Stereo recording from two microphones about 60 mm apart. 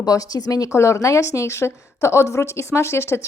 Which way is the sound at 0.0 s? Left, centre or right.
Left.